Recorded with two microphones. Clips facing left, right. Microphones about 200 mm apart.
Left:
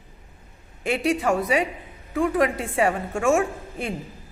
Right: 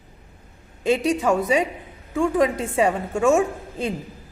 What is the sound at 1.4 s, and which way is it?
A woman's voice, 25° right (ahead or behind).